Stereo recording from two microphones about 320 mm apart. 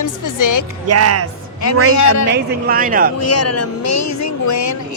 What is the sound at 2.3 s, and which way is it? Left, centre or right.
Speech, right.